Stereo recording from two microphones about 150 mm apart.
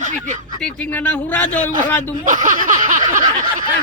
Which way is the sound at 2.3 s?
60° right (ahead or behind).